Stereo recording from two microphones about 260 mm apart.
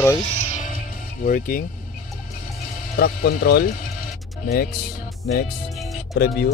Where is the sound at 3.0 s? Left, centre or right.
Left.